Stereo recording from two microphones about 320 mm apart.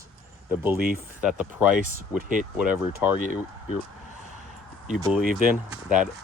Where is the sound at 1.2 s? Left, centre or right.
Centre.